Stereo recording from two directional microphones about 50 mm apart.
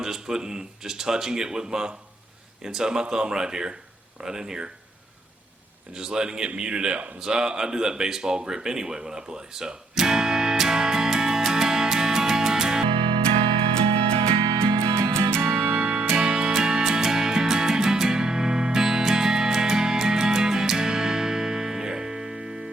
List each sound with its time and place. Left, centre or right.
0.0 s speech: centre
5.9 s speech: centre
7.2 s a sound: centre
14.6 s music: right
15.4 s music: right
15.7 s music: right